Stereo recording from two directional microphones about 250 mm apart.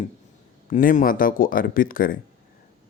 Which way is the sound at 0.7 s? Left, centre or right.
Left.